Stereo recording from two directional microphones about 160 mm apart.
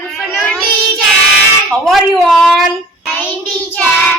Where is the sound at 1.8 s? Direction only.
Centre (ahead or behind).